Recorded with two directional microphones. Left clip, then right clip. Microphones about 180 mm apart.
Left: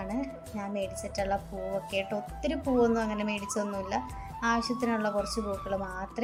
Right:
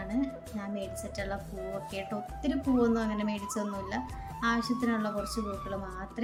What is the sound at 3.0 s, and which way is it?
Speech, 15° left (ahead or behind).